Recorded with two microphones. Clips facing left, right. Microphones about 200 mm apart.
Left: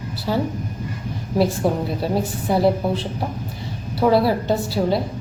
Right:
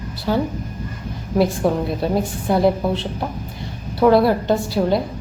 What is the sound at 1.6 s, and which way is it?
Speech, 5° left (ahead or behind).